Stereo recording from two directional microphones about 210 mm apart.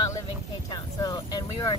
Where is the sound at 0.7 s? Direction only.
20° left (ahead or behind).